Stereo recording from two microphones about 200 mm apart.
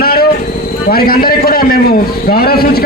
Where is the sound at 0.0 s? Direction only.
50° left (ahead or behind).